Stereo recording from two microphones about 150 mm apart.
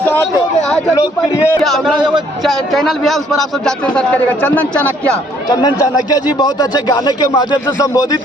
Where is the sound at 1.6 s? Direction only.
Centre (ahead or behind).